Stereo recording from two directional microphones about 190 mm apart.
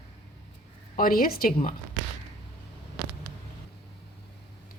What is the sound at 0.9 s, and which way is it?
Speech, 50° left (ahead or behind).